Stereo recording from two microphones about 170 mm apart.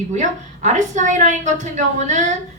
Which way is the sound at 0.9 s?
45° right (ahead or behind).